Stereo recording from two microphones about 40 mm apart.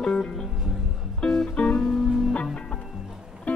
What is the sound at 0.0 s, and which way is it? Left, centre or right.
Music, left.